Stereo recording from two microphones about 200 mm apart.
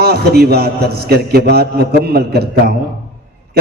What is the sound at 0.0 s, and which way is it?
A man's voice, 50° right (ahead or behind).